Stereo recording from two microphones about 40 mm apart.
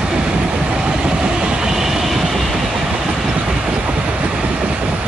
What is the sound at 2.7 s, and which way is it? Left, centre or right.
Train, centre.